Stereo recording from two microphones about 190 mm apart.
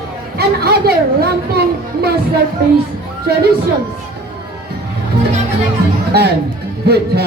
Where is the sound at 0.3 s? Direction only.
55° right (ahead or behind).